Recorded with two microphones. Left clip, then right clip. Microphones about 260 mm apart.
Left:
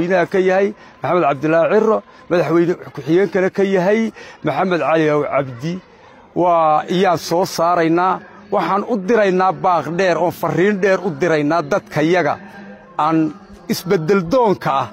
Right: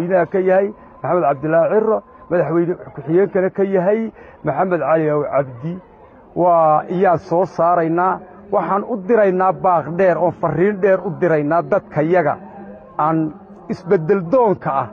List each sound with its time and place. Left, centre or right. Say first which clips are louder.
0.0 s a man's voice: left 1 dB; left
14.0 s speech: left 1 dB; left